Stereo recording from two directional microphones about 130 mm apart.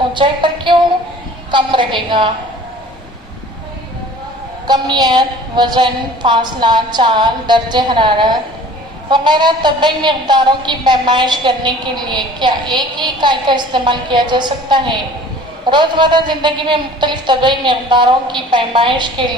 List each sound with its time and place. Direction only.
0.1 s a sound: 40° right (ahead or behind)
1.5 s a woman's voice: 35° right (ahead or behind)
4.6 s a woman's voice: 35° right (ahead or behind)